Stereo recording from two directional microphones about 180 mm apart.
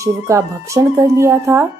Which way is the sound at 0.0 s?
15° right (ahead or behind).